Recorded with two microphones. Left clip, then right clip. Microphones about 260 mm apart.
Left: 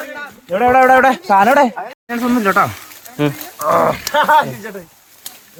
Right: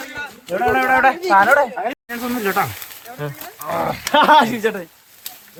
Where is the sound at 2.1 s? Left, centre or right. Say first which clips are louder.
Left 6 dB; centre.